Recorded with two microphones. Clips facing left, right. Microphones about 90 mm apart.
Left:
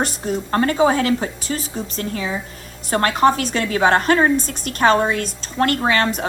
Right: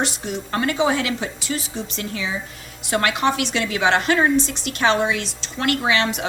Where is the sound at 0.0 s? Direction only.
40° left (ahead or behind).